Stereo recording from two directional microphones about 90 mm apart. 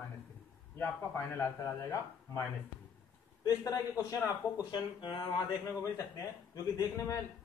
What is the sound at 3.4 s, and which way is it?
A man's voice, 40° left (ahead or behind).